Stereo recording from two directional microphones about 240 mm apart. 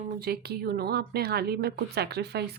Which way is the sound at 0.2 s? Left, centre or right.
Right.